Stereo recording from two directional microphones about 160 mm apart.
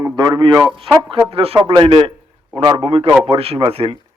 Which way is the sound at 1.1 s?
35° right (ahead or behind).